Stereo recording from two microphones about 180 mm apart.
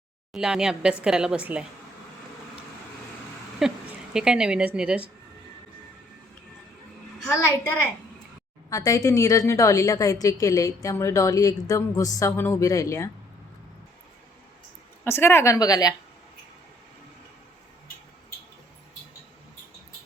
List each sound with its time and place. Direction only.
0.3 s a woman's voice: 5° right (ahead or behind)
3.6 s a woman's voice: centre (ahead or behind)
8.7 s a woman's voice: 20° left (ahead or behind)
15.0 s a woman's voice: 15° left (ahead or behind)